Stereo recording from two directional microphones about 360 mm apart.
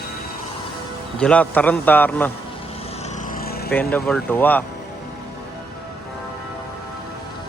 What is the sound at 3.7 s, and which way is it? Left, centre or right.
Speech, centre.